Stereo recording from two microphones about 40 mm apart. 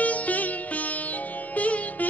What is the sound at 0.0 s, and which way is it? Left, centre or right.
Music, left.